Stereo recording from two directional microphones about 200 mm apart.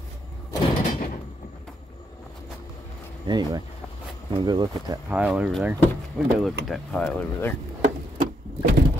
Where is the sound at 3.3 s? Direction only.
20° right (ahead or behind).